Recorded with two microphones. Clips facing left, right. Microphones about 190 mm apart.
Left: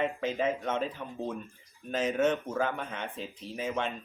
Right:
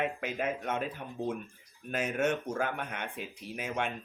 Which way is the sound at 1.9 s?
10° right (ahead or behind).